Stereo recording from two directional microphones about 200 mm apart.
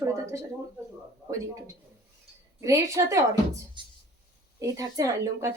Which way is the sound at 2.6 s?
15° right (ahead or behind).